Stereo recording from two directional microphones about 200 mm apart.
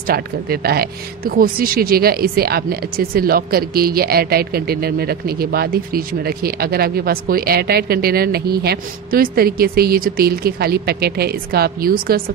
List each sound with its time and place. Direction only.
0.0 s speech: 50° right (ahead or behind)